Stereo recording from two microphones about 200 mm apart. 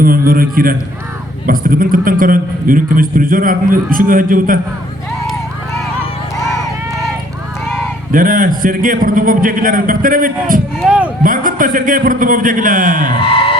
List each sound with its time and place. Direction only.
0.0 s a man's voice: 45° right (ahead or behind)
8.1 s a man's voice: 45° right (ahead or behind)
10.8 s speech: 5° right (ahead or behind)
11.2 s a man's voice: 45° right (ahead or behind)
13.2 s a sound: 25° left (ahead or behind)